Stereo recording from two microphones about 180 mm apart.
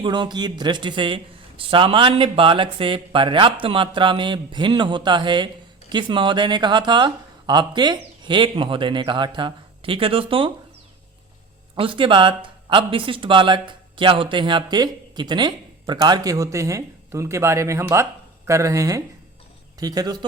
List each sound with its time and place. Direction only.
0.0 s speech: 25° right (ahead or behind)
11.8 s speech: 30° right (ahead or behind)